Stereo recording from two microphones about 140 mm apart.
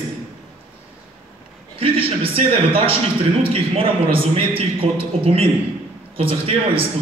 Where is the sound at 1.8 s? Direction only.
40° right (ahead or behind).